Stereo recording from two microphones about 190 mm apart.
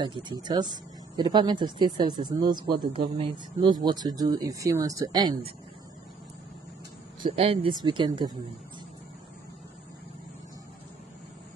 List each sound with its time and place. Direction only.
0.0 s speech: 25° right (ahead or behind)
7.2 s speech: 30° right (ahead or behind)